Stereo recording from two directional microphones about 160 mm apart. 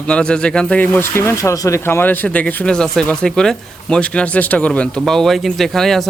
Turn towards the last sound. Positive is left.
turn(degrees=0)  # may be behind; listen again after turning